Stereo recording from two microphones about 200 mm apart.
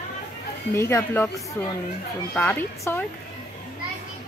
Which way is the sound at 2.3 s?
10° left (ahead or behind).